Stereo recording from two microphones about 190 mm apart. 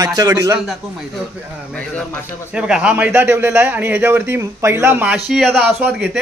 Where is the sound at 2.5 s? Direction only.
5° right (ahead or behind).